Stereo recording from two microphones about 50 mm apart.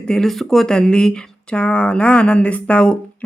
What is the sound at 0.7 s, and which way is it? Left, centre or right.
Speech, centre.